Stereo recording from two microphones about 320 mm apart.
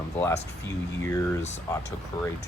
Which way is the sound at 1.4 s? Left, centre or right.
Left.